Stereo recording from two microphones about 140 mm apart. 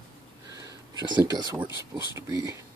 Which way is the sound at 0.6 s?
25° right (ahead or behind).